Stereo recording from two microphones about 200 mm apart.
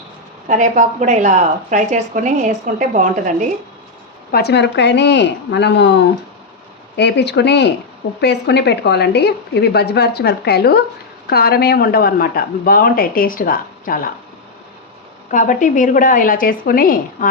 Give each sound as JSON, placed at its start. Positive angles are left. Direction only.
{"t": 0.4, "sound": "a woman's voice", "side_deg": -40}
{"t": 4.3, "sound": "a woman's voice", "side_deg": 55}
{"t": 15.3, "sound": "a woman's voice", "side_deg": 40}